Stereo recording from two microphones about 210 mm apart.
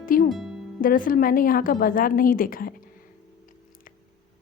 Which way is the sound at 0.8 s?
40° left (ahead or behind).